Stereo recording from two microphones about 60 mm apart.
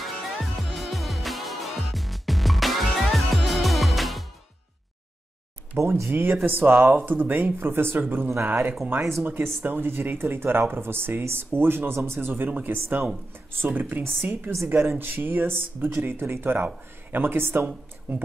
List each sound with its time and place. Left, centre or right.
0.0 s music: centre
5.8 s speech: right